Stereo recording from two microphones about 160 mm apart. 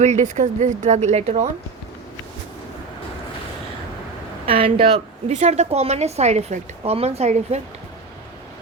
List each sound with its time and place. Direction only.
0.0 s speech: 45° right (ahead or behind)
4.4 s a woman's voice: 35° right (ahead or behind)